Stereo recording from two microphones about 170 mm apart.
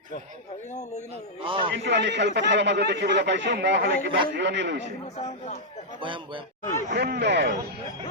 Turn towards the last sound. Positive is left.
turn(degrees=-85)